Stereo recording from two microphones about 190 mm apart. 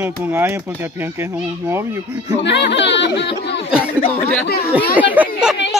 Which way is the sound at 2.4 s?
65° left (ahead or behind).